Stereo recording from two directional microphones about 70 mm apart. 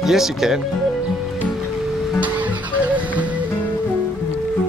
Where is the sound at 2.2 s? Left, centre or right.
Right.